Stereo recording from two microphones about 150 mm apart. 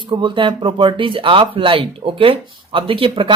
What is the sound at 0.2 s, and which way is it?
A man's voice, 30° right (ahead or behind).